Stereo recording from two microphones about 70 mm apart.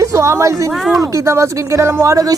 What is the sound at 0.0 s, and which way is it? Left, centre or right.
Speech, right.